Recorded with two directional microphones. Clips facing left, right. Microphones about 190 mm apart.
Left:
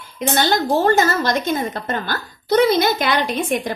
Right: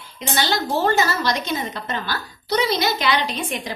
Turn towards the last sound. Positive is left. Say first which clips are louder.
# left 6 dB
turn(degrees=50)  # may be behind; listen again after turning